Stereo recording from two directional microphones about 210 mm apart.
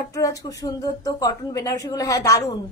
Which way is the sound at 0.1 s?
15° left (ahead or behind).